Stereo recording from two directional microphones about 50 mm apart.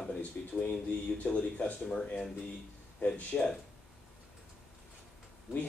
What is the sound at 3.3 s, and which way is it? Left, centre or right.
Speech, centre.